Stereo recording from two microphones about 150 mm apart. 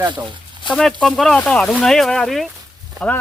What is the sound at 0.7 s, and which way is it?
Speech, 5° left (ahead or behind).